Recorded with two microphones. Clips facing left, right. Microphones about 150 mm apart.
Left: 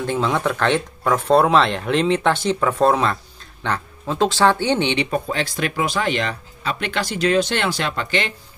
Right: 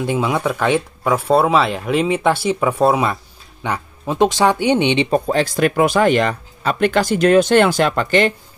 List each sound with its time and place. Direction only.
0.0 s speech: 10° right (ahead or behind)
5.1 s speech: 40° right (ahead or behind)